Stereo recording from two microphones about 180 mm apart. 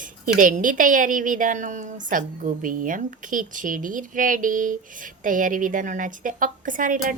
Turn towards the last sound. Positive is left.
turn(degrees=-45)  # may be behind; listen again after turning